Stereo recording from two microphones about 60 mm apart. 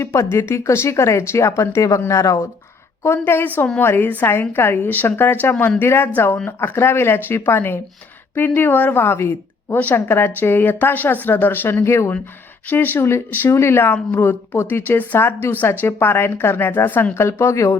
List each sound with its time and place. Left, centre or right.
0.0 s speech: left
3.0 s a woman's voice: left
12.7 s a woman's voice: left
15.4 s a woman's voice: left
17.2 s speech: left